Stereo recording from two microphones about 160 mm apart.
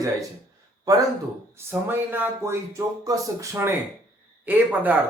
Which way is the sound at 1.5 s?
15° right (ahead or behind).